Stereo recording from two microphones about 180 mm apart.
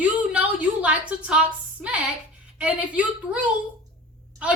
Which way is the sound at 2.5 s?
5° right (ahead or behind).